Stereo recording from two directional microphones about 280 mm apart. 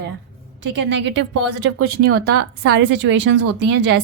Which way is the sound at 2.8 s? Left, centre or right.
Right.